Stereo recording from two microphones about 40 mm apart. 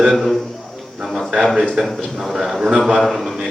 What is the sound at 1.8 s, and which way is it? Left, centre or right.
A man's voice, centre.